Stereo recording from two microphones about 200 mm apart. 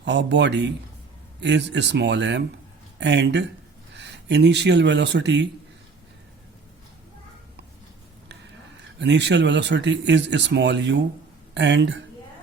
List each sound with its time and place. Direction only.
0.0 s speech: 60° right (ahead or behind)
9.0 s speech: 60° right (ahead or behind)